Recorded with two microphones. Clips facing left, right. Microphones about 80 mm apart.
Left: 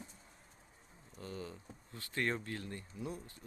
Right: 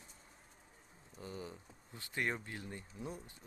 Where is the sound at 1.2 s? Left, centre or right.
Centre.